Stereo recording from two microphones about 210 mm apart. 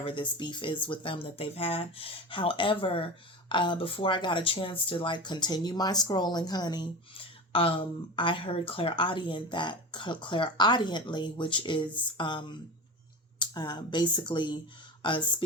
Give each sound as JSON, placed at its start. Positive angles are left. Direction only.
{"t": 0.0, "sound": "speech", "side_deg": 25}